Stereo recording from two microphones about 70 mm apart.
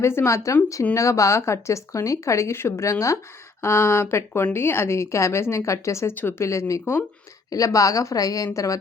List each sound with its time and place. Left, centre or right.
0.0 s a woman's voice: left